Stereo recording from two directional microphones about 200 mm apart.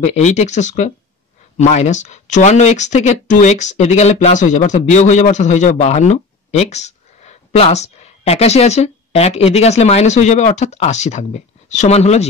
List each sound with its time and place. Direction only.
0.0 s speech: 35° left (ahead or behind)